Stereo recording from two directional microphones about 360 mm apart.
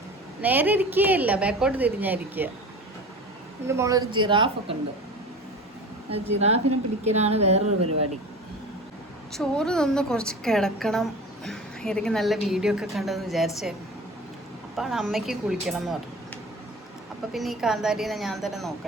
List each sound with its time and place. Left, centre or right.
0.4 s speech: centre
3.7 s speech: centre
6.1 s speech: centre
7.8 s speech: right
9.3 s speech: centre
14.8 s speech: centre
17.3 s speech: centre